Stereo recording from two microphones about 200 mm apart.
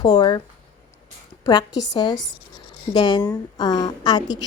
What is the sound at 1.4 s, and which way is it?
Speech, 20° left (ahead or behind).